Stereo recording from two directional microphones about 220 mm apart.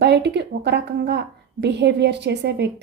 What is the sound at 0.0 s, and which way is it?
A woman's voice, 50° right (ahead or behind).